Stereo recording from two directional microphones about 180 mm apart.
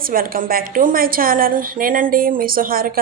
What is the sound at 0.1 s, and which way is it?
A woman's voice, 50° right (ahead or behind).